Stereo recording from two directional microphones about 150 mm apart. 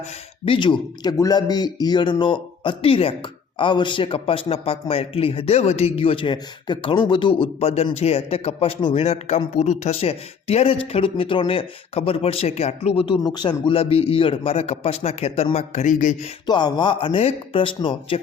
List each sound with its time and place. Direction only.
0.0 s speech: 35° left (ahead or behind)
13.2 s speech: 30° left (ahead or behind); by 16.3 s 55° left (ahead or behind)
16.5 s speech: 30° left (ahead or behind)